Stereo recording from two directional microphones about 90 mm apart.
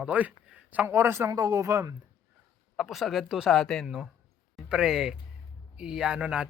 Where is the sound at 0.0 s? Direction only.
15° right (ahead or behind).